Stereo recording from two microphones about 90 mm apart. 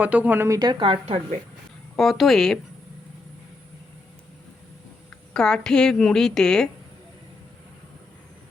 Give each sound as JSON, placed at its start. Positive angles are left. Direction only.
{"t": 0.0, "sound": "speech", "side_deg": -15}
{"t": 0.3, "sound": "speech", "side_deg": -35}
{"t": 0.6, "sound": "a woman's voice", "side_deg": -55}
{"t": 2.0, "sound": "speech", "side_deg": 0}
{"t": 5.3, "sound": "a woman's voice", "side_deg": 5}